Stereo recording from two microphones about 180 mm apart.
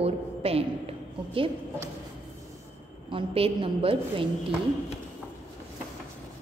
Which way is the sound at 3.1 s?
30° right (ahead or behind).